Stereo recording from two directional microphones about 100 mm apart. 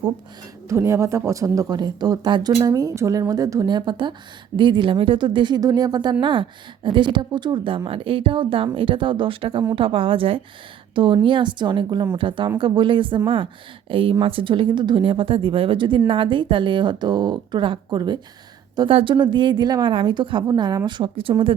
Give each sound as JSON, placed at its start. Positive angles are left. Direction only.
{"t": 0.7, "sound": "speech", "side_deg": -30}
{"t": 3.7, "sound": "a woman's voice", "side_deg": -50}
{"t": 7.9, "sound": "a woman's voice", "side_deg": -65}
{"t": 18.9, "sound": "a woman's voice", "side_deg": -60}